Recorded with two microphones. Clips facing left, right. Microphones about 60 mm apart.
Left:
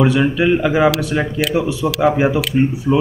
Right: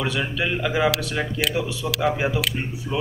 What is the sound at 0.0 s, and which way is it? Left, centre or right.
A man's voice, centre.